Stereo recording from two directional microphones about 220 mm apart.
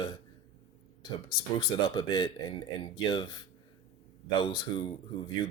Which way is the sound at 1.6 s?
20° left (ahead or behind).